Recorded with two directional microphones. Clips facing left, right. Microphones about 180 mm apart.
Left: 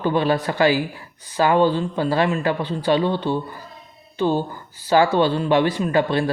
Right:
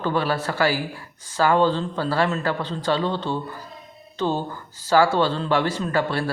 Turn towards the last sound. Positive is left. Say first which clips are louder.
# left 4 dB
turn(degrees=15)  # may be behind; listen again after turning